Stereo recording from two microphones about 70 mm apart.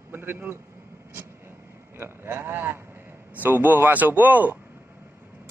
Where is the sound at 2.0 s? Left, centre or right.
Right.